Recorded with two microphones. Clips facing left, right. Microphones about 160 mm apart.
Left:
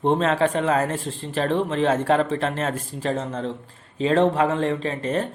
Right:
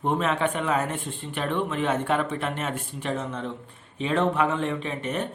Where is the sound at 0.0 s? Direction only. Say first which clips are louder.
Left 5 dB; 30° left (ahead or behind).